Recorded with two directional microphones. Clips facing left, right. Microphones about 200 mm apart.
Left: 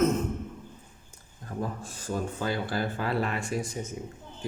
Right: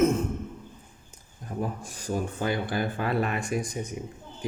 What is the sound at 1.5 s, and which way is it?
Speech, 15° right (ahead or behind).